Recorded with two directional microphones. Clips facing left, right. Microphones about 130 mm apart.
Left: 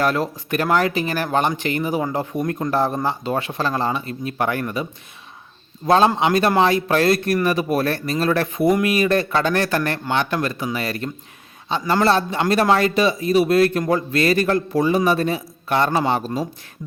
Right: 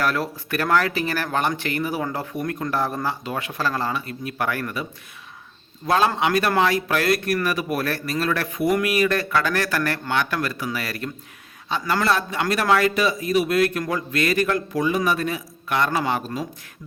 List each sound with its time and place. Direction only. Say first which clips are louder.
0.0 s speech: left 3 dB; 20° left (ahead or behind)